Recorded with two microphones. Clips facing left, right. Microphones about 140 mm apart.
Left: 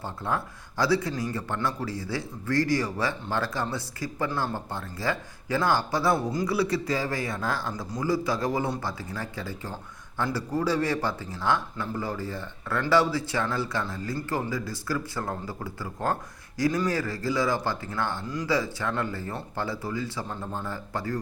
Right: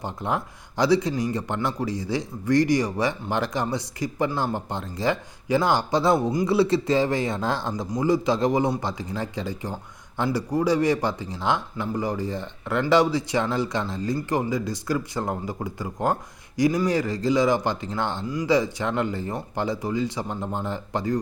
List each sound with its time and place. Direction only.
0.0 s speech: 20° right (ahead or behind)